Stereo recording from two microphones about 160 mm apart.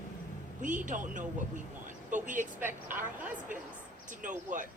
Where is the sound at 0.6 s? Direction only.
55° right (ahead or behind).